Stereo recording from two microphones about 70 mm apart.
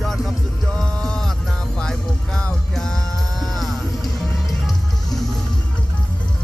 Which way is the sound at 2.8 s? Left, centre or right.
Centre.